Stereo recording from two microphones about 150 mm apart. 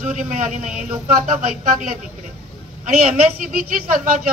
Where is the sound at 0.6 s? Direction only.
5° right (ahead or behind).